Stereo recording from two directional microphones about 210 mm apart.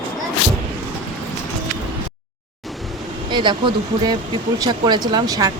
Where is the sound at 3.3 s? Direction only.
20° right (ahead or behind).